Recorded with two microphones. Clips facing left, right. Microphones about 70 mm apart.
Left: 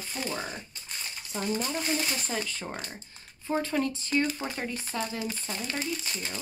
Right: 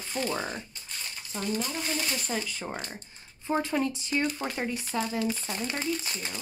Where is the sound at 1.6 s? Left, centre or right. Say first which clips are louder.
Left 2 dB; centre.